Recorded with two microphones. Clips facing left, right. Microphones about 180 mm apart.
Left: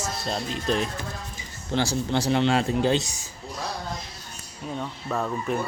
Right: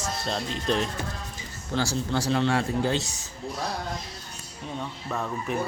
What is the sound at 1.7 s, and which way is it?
A man's voice, 20° left (ahead or behind).